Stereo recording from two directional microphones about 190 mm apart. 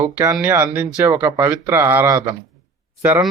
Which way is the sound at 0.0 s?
20° right (ahead or behind).